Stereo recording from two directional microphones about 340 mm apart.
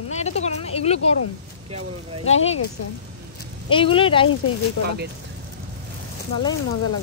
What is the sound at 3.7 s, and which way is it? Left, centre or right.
Speech, centre.